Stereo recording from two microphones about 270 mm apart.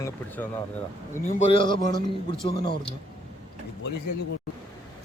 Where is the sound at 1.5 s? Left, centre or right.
Centre.